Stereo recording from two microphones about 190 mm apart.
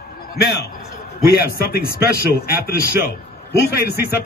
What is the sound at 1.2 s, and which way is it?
Speech, 55° left (ahead or behind).